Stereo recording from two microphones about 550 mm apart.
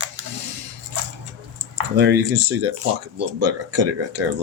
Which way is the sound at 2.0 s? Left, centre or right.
Centre.